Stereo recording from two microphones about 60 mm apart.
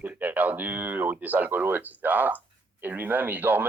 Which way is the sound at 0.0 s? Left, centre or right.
Right.